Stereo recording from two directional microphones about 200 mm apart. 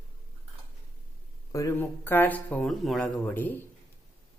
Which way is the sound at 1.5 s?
15° left (ahead or behind).